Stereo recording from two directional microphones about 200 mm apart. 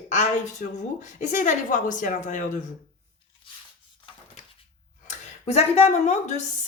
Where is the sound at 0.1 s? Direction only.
35° left (ahead or behind).